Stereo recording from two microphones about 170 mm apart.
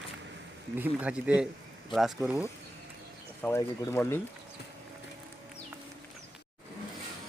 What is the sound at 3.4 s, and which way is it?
Speech, 15° left (ahead or behind).